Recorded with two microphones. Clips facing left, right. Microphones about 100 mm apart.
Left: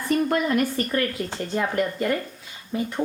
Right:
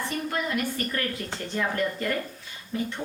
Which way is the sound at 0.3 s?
50° left (ahead or behind).